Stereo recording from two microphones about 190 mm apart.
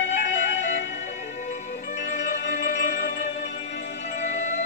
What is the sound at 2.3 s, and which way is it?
Music, 40° left (ahead or behind).